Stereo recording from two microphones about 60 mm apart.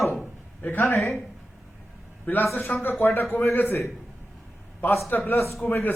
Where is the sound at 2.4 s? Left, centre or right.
Left.